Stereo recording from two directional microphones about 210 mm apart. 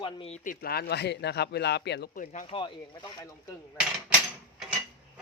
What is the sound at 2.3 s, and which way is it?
Speech, 30° left (ahead or behind).